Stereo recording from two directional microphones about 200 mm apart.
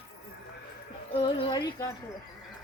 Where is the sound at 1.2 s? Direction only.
20° left (ahead or behind).